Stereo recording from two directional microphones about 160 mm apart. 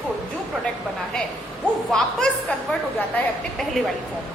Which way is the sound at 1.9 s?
5° left (ahead or behind).